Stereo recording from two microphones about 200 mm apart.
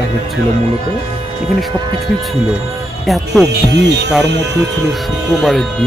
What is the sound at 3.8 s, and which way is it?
Speech, 60° right (ahead or behind).